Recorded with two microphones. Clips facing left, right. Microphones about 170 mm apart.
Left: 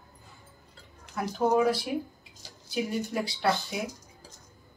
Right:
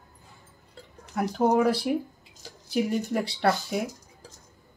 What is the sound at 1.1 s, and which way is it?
Speech, 60° right (ahead or behind).